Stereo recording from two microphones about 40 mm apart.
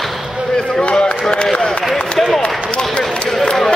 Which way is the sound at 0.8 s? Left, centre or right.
Left.